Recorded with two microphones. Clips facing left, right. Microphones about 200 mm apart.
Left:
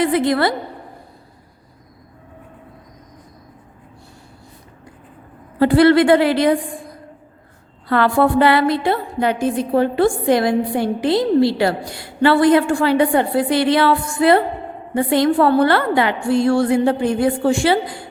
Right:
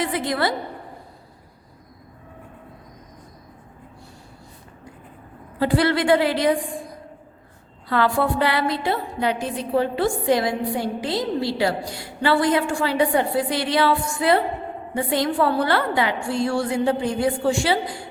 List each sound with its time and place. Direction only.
0.0 s a woman's voice: 60° left (ahead or behind)
5.5 s a woman's voice: 60° left (ahead or behind)
7.9 s a woman's voice: 60° left (ahead or behind)